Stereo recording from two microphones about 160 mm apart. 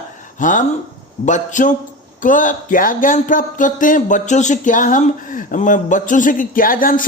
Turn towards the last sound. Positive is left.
turn(degrees=60)  # may be behind; listen again after turning